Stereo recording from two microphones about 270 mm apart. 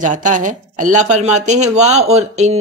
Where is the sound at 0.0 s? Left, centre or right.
Right.